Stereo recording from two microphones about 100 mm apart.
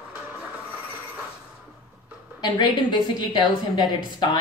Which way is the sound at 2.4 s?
50° left (ahead or behind).